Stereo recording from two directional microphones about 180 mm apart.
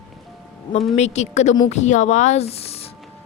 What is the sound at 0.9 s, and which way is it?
Speech, 40° left (ahead or behind).